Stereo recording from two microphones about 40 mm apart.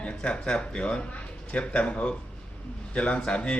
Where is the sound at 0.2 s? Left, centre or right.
Left.